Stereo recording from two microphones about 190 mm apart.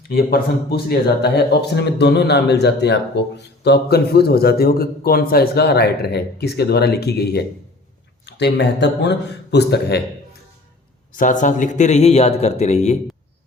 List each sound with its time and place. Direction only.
0.1 s a man's voice: 55° left (ahead or behind)
11.2 s a man's voice: 45° left (ahead or behind)